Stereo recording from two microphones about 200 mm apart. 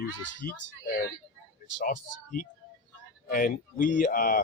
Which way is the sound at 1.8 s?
45° left (ahead or behind).